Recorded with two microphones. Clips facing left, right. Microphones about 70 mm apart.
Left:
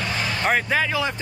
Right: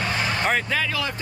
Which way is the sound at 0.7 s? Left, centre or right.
Centre.